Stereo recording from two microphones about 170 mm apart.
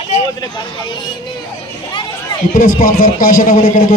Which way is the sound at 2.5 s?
55° left (ahead or behind).